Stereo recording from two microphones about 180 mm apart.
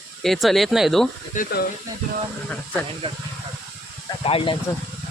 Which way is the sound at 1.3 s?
45° left (ahead or behind).